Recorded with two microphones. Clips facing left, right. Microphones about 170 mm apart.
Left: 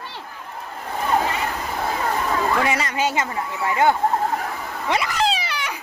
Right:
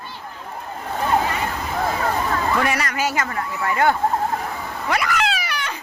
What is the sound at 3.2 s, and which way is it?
Speech, 15° left (ahead or behind).